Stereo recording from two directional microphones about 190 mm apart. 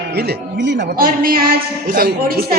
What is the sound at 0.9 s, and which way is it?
A man's voice, 50° right (ahead or behind).